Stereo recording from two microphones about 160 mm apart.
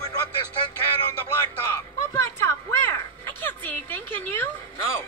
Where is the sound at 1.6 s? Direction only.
15° left (ahead or behind).